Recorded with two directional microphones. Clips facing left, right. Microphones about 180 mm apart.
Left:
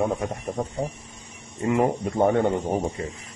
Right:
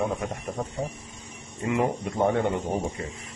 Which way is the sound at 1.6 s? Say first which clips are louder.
Left 4 dB; 40° left (ahead or behind).